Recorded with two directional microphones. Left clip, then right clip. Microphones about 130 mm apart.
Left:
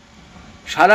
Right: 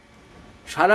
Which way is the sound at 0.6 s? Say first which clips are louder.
Left 6 dB; 25° right (ahead or behind).